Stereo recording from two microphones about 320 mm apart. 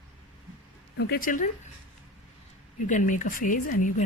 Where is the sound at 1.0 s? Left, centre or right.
Left.